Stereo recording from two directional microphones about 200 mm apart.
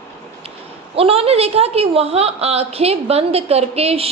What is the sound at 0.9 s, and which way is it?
A woman's voice, 30° right (ahead or behind).